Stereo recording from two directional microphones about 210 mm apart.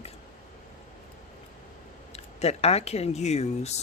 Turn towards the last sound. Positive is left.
turn(degrees=30)  # may be behind; listen again after turning